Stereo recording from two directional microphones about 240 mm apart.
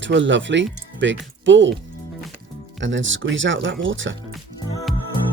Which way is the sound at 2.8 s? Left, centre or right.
Right.